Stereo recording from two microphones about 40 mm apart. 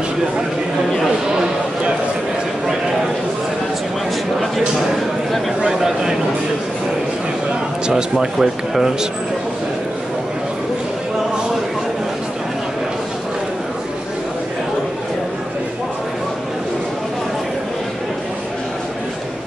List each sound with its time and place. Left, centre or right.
1.3 s a sound: centre
5.8 s speech: centre
7.9 s speech: centre